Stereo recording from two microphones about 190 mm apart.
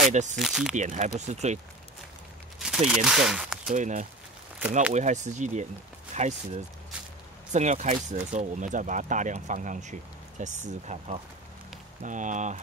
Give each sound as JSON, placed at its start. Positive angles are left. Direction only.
{"t": 0.1, "sound": "speech", "side_deg": -40}
{"t": 0.4, "sound": "speech", "side_deg": 0}
{"t": 0.7, "sound": "speech", "side_deg": -40}
{"t": 2.6, "sound": "speech", "side_deg": -5}
{"t": 3.7, "sound": "speech", "side_deg": -40}